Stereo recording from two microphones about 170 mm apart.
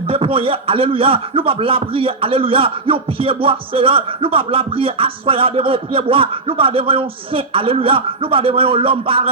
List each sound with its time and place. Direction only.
0.1 s speech: 35° right (ahead or behind)